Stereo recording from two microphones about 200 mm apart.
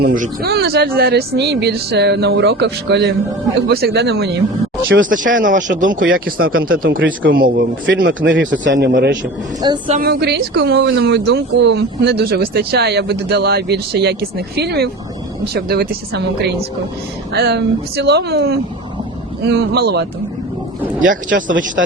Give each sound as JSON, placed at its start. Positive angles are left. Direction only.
{"t": 0.0, "sound": "speech", "side_deg": -45}
{"t": 5.0, "sound": "speech", "side_deg": -40}
{"t": 7.0, "sound": "speech", "side_deg": -70}
{"t": 7.3, "sound": "speech", "side_deg": -50}
{"t": 9.6, "sound": "speech", "side_deg": -20}
{"t": 10.0, "sound": "speech", "side_deg": -55}
{"t": 21.8, "sound": "speech", "side_deg": -60}